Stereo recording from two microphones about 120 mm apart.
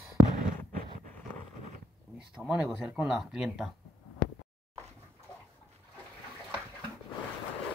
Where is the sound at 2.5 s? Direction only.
5° right (ahead or behind).